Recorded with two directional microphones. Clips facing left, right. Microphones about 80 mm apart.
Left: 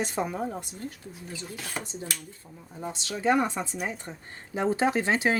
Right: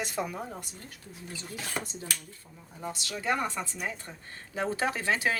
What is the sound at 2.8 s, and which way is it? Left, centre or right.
Speech, left.